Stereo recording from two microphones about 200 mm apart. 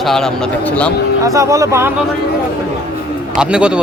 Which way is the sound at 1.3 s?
15° right (ahead or behind).